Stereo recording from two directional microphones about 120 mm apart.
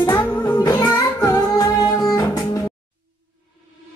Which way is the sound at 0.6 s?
30° left (ahead or behind).